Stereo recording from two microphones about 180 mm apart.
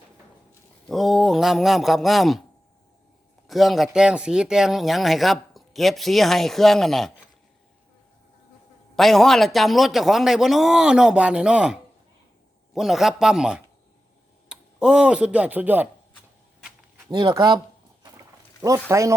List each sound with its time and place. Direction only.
0.9 s speech: centre (ahead or behind)
3.4 s a man's voice: centre (ahead or behind)
9.0 s speech: centre (ahead or behind)
17.1 s speech: 25° right (ahead or behind)
18.9 s speech: 15° right (ahead or behind)